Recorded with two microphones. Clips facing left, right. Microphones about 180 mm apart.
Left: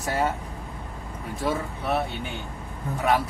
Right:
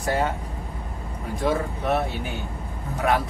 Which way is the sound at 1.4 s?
Centre (ahead or behind).